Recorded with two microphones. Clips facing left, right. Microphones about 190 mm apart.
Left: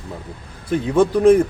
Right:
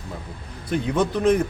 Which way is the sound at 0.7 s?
10° left (ahead or behind).